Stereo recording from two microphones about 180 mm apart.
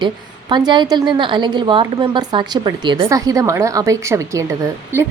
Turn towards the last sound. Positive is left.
turn(degrees=-15)  # may be behind; listen again after turning